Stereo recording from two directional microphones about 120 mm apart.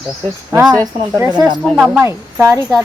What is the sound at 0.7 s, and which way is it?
Speech, 30° right (ahead or behind).